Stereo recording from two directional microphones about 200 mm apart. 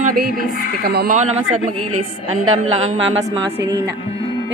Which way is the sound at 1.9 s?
90° right.